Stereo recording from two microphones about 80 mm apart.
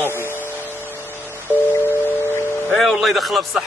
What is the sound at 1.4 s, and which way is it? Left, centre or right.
Music, left.